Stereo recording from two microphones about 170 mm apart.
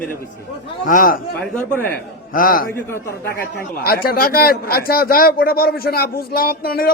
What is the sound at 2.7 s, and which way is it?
Speech, 15° left (ahead or behind).